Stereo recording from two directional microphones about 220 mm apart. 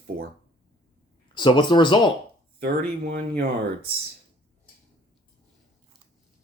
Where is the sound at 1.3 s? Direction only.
20° left (ahead or behind).